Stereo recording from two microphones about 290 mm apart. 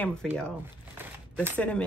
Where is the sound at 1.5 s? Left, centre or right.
Centre.